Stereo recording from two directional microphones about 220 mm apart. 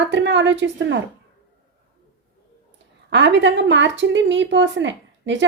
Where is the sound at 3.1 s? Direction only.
55° right (ahead or behind).